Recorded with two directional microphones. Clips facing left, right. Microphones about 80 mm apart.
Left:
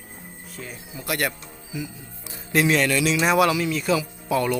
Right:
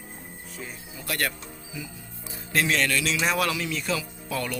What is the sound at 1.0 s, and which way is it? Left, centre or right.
Speech, centre.